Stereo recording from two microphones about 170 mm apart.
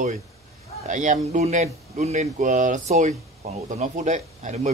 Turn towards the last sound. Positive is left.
turn(degrees=-45)  # may be behind; listen again after turning